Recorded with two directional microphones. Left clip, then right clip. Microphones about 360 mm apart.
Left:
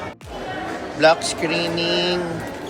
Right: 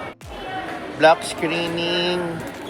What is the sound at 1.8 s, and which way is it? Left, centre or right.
Vehicle, left.